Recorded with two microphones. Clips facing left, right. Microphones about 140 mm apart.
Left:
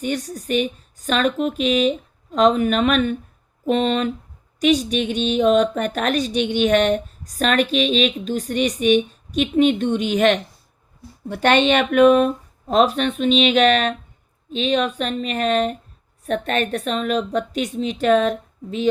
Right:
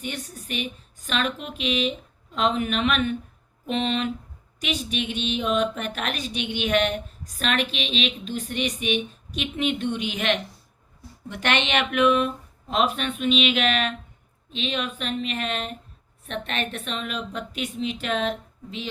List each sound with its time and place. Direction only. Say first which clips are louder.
0.0 s speech: left 9 dB; 40° left (ahead or behind)